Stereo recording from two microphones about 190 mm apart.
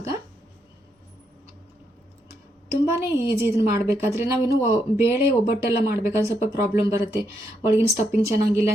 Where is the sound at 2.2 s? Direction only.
15° right (ahead or behind).